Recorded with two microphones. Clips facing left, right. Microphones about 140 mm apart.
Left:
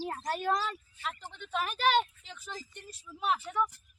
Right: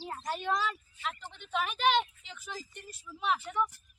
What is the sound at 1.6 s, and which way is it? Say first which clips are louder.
Speech: left 1 dB; 40° left (ahead or behind).